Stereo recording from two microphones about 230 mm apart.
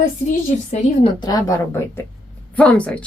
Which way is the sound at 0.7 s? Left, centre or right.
Left.